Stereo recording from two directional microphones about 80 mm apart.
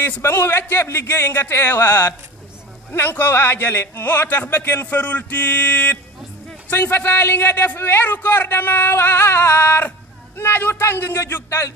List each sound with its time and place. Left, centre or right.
0.0 s a man's voice: left